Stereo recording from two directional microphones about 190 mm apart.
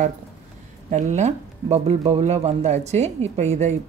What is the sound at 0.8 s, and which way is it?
Speech, 35° right (ahead or behind).